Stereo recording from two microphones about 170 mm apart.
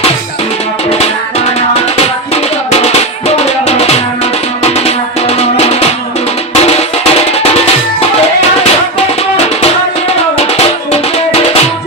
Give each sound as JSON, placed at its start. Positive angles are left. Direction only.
{"t": 2.3, "sound": "music", "side_deg": 40}
{"t": 10.3, "sound": "music", "side_deg": 40}